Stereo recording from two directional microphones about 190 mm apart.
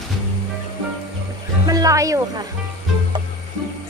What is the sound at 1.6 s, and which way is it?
Speech, 20° right (ahead or behind).